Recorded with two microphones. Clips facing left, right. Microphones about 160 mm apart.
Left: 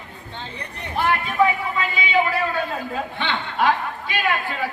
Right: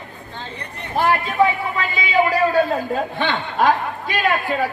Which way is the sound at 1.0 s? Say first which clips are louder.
Right 3 dB; 40° right (ahead or behind).